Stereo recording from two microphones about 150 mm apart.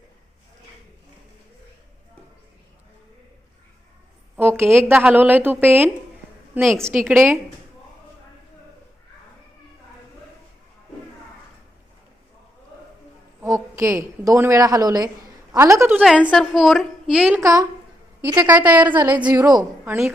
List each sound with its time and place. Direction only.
4.4 s a sound: 15° right (ahead or behind)
4.9 s a woman's voice: 10° right (ahead or behind)
13.4 s a woman's voice: 20° right (ahead or behind)
16.0 s a woman's voice: 5° right (ahead or behind)
17.4 s a woman's voice: 20° right (ahead or behind)
18.3 s a woman's voice: 10° right (ahead or behind)
19.2 s a woman's voice: 25° right (ahead or behind)
19.8 s a woman's voice: 15° right (ahead or behind)